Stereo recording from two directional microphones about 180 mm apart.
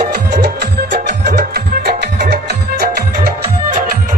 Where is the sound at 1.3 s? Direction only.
60° right (ahead or behind).